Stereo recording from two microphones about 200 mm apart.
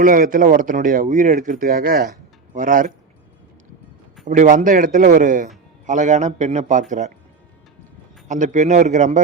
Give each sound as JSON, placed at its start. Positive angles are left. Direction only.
{"t": 0.0, "sound": "a man's voice", "side_deg": -40}
{"t": 4.3, "sound": "a man's voice", "side_deg": -40}
{"t": 8.3, "sound": "a man's voice", "side_deg": -35}